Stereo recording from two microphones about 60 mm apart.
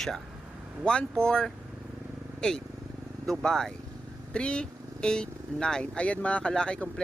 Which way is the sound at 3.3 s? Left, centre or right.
Centre.